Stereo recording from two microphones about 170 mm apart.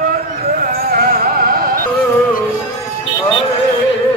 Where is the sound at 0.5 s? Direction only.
65° right (ahead or behind).